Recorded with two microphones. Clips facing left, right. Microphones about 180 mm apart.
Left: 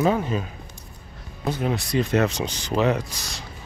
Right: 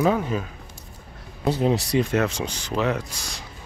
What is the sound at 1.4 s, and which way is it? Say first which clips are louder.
Speech: right 4 dB; 35° right (ahead or behind).